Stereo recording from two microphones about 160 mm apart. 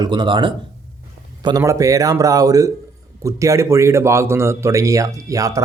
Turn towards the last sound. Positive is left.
turn(degrees=-20)  # may be behind; listen again after turning